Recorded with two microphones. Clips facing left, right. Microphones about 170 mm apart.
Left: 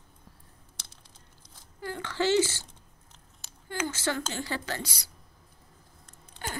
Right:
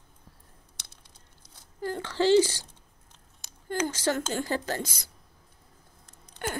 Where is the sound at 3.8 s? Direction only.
40° right (ahead or behind).